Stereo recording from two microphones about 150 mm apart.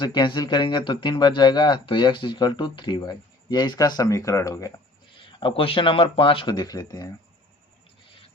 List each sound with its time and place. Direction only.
0.0 s speech: 30° left (ahead or behind)
5.4 s speech: 35° left (ahead or behind)